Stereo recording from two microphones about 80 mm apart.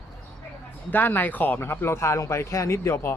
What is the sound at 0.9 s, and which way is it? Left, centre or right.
A man's voice, left.